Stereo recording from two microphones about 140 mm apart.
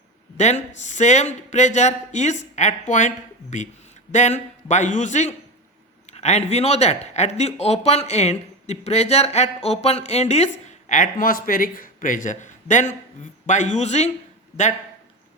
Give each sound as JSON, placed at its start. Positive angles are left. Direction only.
{"t": 0.3, "sound": "speech", "side_deg": 55}